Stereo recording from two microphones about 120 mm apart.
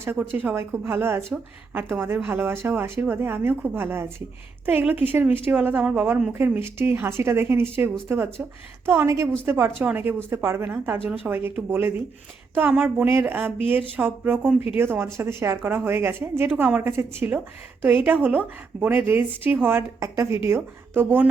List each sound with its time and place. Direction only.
0.0 s a woman's voice: 15° right (ahead or behind)